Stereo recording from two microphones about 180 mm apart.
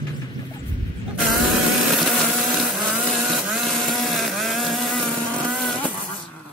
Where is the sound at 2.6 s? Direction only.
Centre (ahead or behind).